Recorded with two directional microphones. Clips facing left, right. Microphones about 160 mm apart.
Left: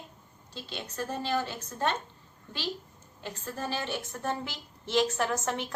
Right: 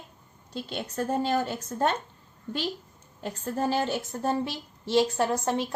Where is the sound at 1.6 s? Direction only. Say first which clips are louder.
Right 5 dB; 30° right (ahead or behind).